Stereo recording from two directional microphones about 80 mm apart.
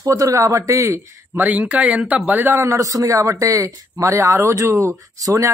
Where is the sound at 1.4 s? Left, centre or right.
Right.